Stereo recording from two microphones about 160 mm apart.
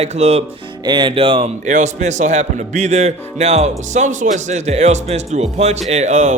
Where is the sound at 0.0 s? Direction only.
45° right (ahead or behind).